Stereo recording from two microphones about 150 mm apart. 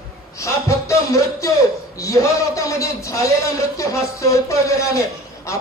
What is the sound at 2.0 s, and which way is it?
A man's voice, 20° left (ahead or behind).